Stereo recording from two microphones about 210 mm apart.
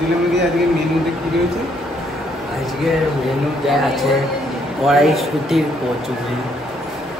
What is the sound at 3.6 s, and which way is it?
A man's voice, centre (ahead or behind).